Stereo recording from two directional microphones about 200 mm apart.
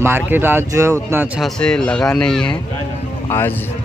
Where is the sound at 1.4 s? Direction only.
5° left (ahead or behind).